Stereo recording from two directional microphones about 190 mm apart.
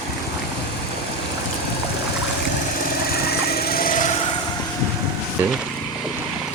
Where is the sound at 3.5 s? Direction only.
55° left (ahead or behind).